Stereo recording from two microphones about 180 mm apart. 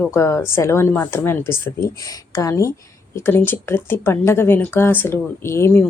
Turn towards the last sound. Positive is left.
turn(degrees=15)  # may be behind; listen again after turning